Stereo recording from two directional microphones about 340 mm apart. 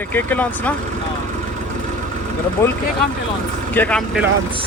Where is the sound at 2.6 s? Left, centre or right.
Centre.